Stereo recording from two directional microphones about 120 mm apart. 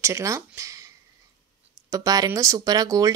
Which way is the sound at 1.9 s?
30° right (ahead or behind).